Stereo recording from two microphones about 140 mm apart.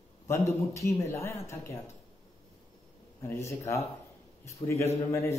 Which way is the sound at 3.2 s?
20° left (ahead or behind).